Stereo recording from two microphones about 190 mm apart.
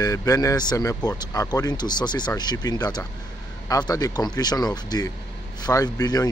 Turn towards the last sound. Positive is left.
turn(degrees=20)  # may be behind; listen again after turning